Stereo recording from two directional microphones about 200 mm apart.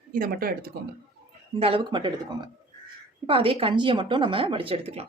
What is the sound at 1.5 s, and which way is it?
Speech, 30° right (ahead or behind).